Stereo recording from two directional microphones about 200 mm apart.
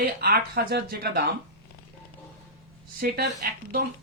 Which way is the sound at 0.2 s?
50° right (ahead or behind).